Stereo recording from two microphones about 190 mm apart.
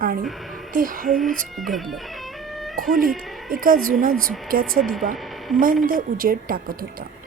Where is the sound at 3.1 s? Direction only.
Centre (ahead or behind).